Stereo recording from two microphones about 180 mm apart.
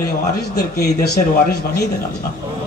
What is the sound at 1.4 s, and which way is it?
Speech, 60° left (ahead or behind).